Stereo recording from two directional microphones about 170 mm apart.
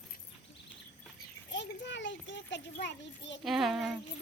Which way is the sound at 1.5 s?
90° left.